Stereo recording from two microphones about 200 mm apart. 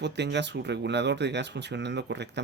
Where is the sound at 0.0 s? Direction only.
60° right (ahead or behind).